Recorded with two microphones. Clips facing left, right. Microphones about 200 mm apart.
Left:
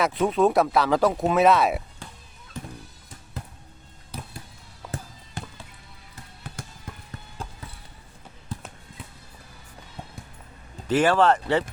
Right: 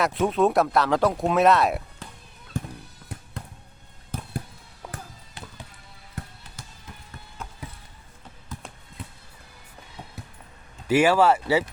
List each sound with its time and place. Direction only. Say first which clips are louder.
0.0 s speech: left 1 dB; centre (ahead or behind)
2.5 s music: right 5 dB; 50° right (ahead or behind)
4.1 s fireworks: right 3 dB; 50° right (ahead or behind)
5.4 s music: left 5 dB; 45° left (ahead or behind)
6.2 s music: right 9 dB; 55° right (ahead or behind)
7.4 s clip-clop: left 2 dB; 30° left (ahead or behind)
8.5 s basketball bounce: left 3 dB; 30° left (ahead or behind)
10.8 s speech: right 1 dB; 10° right (ahead or behind)